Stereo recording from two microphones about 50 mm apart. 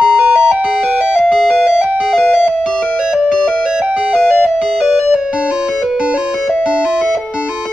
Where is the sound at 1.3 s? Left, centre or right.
Centre.